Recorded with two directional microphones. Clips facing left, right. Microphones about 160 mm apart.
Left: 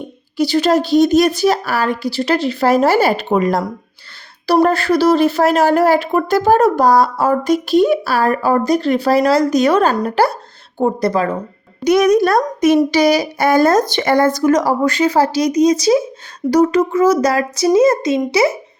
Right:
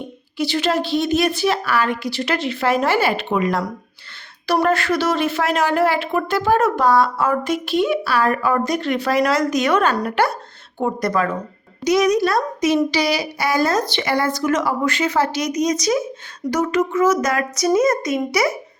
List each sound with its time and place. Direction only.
0.3 s speech: 40° left (ahead or behind)
11.8 s speech: 55° left (ahead or behind); by 18.5 s 25° left (ahead or behind)